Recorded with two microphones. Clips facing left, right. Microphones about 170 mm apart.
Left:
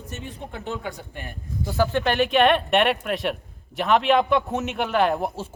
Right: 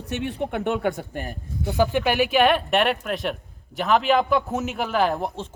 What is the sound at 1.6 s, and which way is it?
Speech, 15° right (ahead or behind).